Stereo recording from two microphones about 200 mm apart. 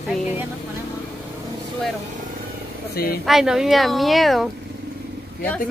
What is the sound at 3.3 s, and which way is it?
A woman's voice, centre (ahead or behind).